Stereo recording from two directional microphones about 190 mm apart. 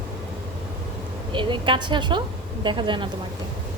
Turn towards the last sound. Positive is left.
turn(degrees=-25)  # may be behind; listen again after turning